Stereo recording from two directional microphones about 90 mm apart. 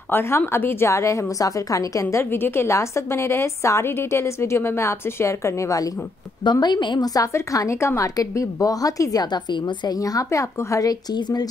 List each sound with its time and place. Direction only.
0.1 s a woman's voice: 25° left (ahead or behind)
6.4 s a woman's voice: 50° left (ahead or behind)
7.2 s a woman's voice: 40° left (ahead or behind); by 9.9 s 55° left (ahead or behind)
9.9 s a woman's voice: 40° left (ahead or behind)